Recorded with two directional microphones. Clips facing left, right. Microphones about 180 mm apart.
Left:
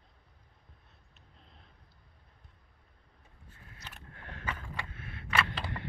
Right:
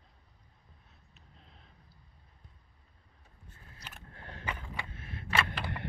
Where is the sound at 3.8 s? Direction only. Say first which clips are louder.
Even; 35° right (ahead or behind).